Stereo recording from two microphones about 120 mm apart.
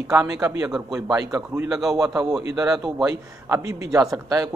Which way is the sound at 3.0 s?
25° right (ahead or behind).